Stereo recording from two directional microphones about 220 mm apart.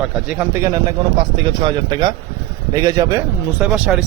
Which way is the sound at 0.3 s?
10° right (ahead or behind).